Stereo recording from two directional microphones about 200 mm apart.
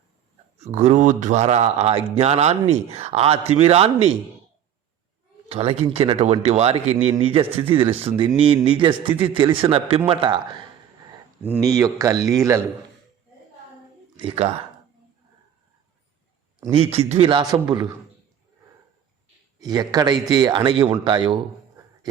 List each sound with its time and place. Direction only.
0.6 s speech: 35° right (ahead or behind)
5.5 s a man's voice: 30° right (ahead or behind)
11.4 s speech: 10° right (ahead or behind)
14.2 s a man's voice: 30° right (ahead or behind)
16.7 s a man's voice: 30° right (ahead or behind)
19.5 s a man's voice: 20° right (ahead or behind)